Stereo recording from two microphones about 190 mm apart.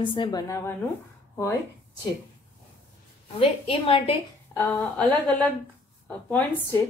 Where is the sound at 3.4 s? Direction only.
30° left (ahead or behind).